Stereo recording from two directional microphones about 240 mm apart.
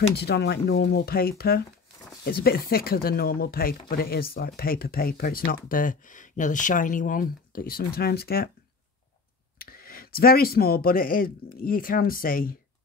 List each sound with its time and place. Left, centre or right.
0.1 s speech: left
9.6 s speech: left